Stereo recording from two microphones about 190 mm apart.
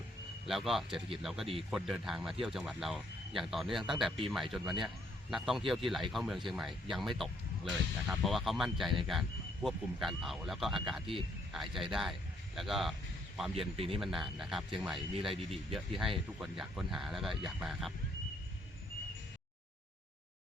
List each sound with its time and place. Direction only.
0.4 s speech: centre (ahead or behind)
13.7 s speech: 30° right (ahead or behind)
14.0 s speech: centre (ahead or behind)